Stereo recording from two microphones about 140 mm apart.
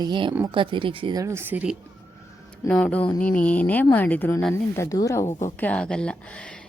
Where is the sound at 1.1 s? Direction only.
20° right (ahead or behind).